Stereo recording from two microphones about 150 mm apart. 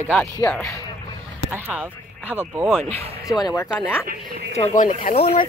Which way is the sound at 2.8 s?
45° right (ahead or behind).